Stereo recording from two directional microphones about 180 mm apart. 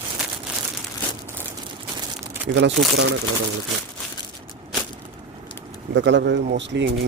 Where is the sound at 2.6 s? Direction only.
80° right.